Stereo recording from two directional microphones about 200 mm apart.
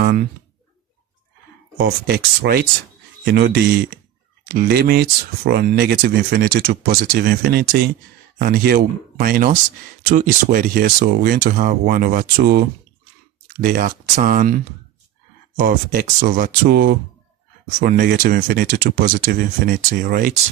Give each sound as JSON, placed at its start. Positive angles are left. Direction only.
{"t": 1.8, "sound": "speech", "side_deg": -50}
{"t": 13.7, "sound": "speech", "side_deg": -45}